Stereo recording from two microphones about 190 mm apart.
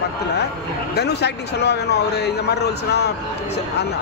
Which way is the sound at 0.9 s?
60° left (ahead or behind).